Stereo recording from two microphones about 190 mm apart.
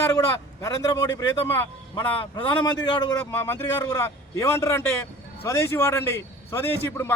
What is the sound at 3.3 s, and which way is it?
Speech, 10° left (ahead or behind).